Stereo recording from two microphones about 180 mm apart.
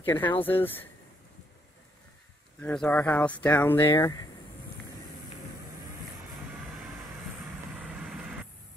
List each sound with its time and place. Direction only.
0.0 s speech: 10° left (ahead or behind)
2.6 s speech: 5° left (ahead or behind)
7.7 s vehicle: 5° right (ahead or behind)